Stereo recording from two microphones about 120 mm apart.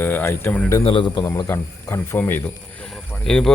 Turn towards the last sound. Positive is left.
turn(degrees=5)  # may be behind; listen again after turning